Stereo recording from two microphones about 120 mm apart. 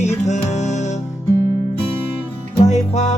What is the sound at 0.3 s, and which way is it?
Music, 75° left (ahead or behind).